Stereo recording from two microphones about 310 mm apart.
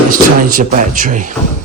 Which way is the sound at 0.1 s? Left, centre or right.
Right.